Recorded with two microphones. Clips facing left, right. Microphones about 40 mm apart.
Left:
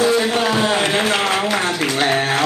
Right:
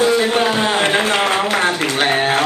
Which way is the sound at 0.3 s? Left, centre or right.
Right.